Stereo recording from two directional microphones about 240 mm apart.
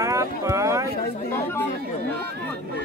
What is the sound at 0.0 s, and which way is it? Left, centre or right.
Boat, centre.